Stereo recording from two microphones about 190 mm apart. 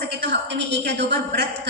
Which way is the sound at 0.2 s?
60° right (ahead or behind).